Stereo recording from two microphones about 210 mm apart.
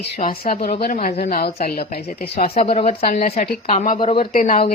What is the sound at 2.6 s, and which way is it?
Speech, 30° left (ahead or behind).